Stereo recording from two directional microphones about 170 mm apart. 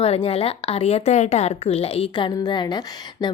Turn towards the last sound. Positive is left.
turn(degrees=25)  # may be behind; listen again after turning